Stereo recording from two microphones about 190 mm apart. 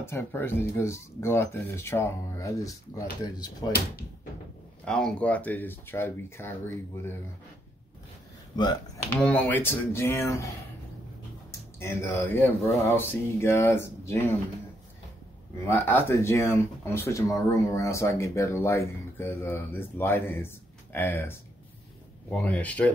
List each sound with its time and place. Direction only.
0.0 s speech: 15° left (ahead or behind)
4.8 s speech: 5° left (ahead or behind)
8.5 s speech: 20° left (ahead or behind)
9.1 s speech: 10° left (ahead or behind)
11.8 s speech: 10° left (ahead or behind)
15.6 s speech: 10° left (ahead or behind)